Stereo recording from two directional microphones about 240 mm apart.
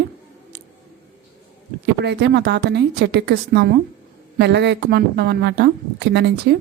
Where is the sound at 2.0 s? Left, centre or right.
Right.